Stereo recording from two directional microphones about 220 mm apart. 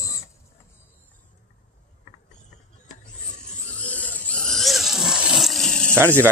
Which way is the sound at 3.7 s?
5° left (ahead or behind).